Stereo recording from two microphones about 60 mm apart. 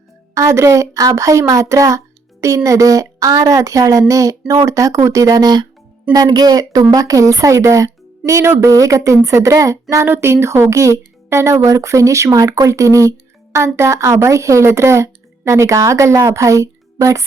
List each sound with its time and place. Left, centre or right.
0.3 s a woman's voice: right
6.9 s a woman's voice: right
10.1 s a woman's voice: right